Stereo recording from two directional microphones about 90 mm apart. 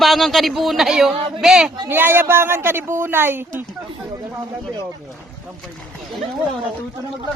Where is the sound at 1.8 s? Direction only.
25° right (ahead or behind).